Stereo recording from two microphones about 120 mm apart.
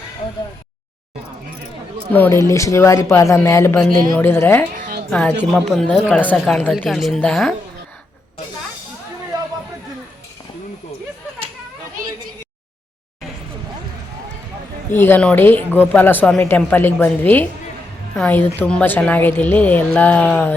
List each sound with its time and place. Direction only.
2.1 s speech: 15° left (ahead or behind)
2.4 s a woman's voice: 25° left (ahead or behind); by 7.5 s 5° left (ahead or behind)
9.3 s a sound: 35° right (ahead or behind)
14.9 s speech: 15° left (ahead or behind)